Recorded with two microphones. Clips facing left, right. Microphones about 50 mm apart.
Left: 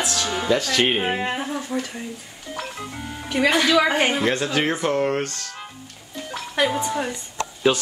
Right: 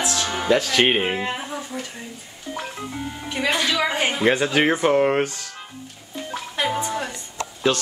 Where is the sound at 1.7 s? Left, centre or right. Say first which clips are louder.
Left 5 dB; left.